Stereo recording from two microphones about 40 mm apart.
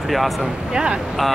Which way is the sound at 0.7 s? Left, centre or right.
Right.